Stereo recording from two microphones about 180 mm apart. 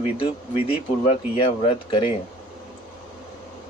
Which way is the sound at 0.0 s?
35° left (ahead or behind).